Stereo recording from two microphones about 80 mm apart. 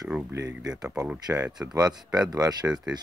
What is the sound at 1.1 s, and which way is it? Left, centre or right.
Speech, centre.